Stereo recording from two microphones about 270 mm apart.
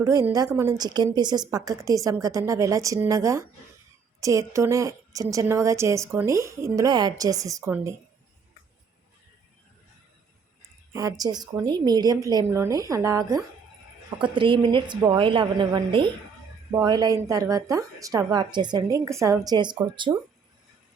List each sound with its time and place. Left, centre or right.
0.0 s a woman's voice: centre
10.9 s a woman's voice: centre